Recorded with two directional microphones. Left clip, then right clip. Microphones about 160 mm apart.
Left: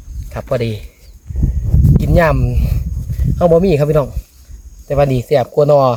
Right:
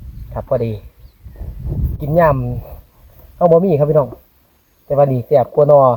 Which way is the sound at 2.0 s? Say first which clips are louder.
Right 1 dB; 15° left (ahead or behind).